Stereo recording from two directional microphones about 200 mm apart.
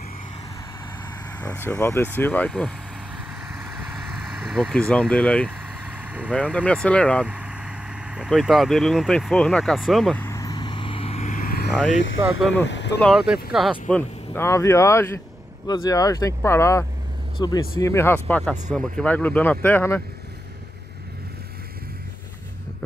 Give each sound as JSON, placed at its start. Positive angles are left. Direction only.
{"t": 1.4, "sound": "speech", "side_deg": 10}
{"t": 4.3, "sound": "speech", "side_deg": 0}
{"t": 5.9, "sound": "vehicle", "side_deg": -5}
{"t": 6.3, "sound": "speech", "side_deg": 5}
{"t": 7.2, "sound": "vehicle", "side_deg": -5}
{"t": 12.4, "sound": "speech", "side_deg": 0}
{"t": 12.6, "sound": "speech", "side_deg": 60}
{"t": 13.0, "sound": "speech", "side_deg": 0}
{"t": 18.4, "sound": "speech", "side_deg": 0}